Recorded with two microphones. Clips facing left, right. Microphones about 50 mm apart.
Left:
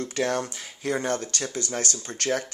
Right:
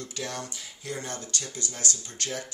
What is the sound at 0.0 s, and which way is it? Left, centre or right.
Speech, left.